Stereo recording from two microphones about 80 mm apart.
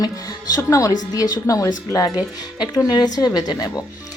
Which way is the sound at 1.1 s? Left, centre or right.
Left.